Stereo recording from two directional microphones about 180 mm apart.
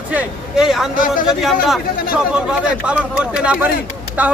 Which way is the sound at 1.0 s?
50° left (ahead or behind).